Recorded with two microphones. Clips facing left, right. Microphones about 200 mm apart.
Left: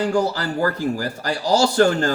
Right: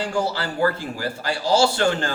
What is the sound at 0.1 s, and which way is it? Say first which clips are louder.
Speech: left 4 dB; 40° left (ahead or behind).